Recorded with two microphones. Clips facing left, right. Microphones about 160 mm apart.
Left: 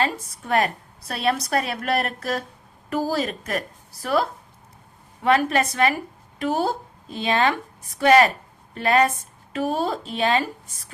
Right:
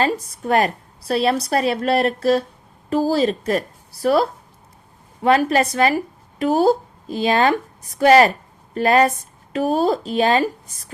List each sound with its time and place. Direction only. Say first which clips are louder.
0.0 s a woman's voice: right 5 dB; 35° right (ahead or behind)